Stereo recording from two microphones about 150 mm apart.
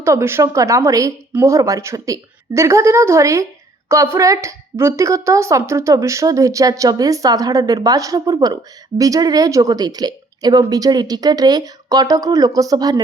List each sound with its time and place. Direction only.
0.0 s a woman's voice: 20° right (ahead or behind)